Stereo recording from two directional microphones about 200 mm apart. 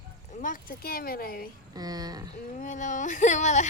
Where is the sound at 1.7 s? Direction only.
20° right (ahead or behind).